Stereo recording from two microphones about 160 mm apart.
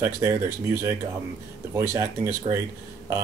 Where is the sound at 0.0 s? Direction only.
20° right (ahead or behind).